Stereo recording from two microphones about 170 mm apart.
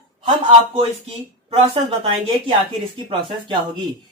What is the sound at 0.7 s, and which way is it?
Speech, 35° right (ahead or behind).